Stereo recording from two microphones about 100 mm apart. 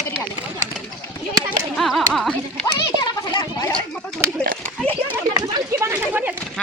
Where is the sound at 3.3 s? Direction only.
40° left (ahead or behind).